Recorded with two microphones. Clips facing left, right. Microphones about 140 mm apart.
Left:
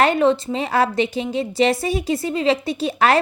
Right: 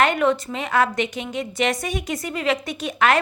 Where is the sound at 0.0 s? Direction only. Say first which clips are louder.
Left 3 dB; 30° left (ahead or behind).